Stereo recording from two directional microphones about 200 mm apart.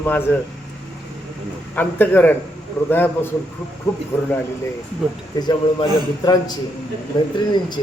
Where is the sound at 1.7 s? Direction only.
10° left (ahead or behind).